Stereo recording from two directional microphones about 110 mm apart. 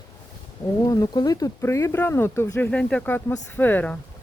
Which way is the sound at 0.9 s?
35° left (ahead or behind).